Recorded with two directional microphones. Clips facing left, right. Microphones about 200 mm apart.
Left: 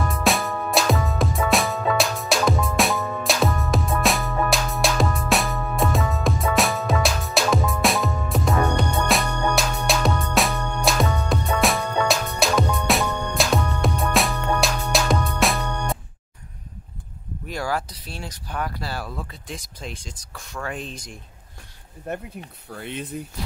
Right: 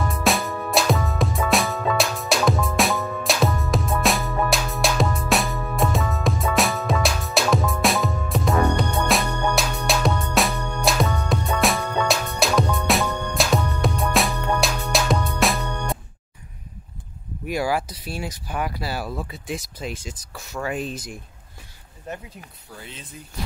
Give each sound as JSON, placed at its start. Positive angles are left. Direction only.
{"t": 0.1, "sound": "music", "side_deg": 0}
{"t": 17.5, "sound": "speech", "side_deg": -10}
{"t": 22.1, "sound": "speech", "side_deg": 55}